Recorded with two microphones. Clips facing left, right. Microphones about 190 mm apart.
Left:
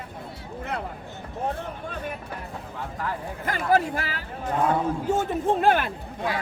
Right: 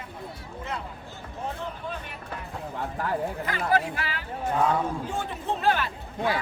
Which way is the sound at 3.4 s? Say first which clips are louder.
Left 6 dB; 45° left (ahead or behind).